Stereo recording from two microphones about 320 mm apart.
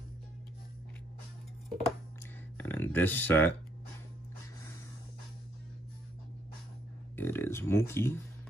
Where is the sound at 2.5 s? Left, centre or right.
Centre.